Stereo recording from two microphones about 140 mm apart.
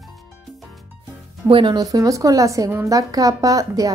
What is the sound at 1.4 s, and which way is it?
A woman's voice, 35° right (ahead or behind).